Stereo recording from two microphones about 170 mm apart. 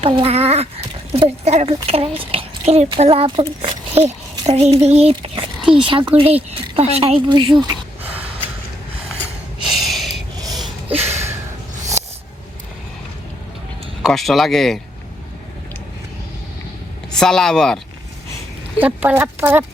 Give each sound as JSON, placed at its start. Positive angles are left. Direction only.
{"t": 0.0, "sound": "a child's voice", "side_deg": -35}
{"t": 9.6, "sound": "a sound", "side_deg": 0}
{"t": 10.9, "sound": "a sound", "side_deg": -40}
{"t": 14.0, "sound": "speech", "side_deg": 0}
{"t": 17.2, "sound": "speech", "side_deg": 5}
{"t": 18.8, "sound": "a woman's voice", "side_deg": -10}